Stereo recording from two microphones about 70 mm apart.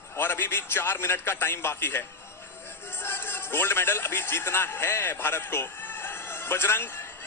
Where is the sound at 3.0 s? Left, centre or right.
Left.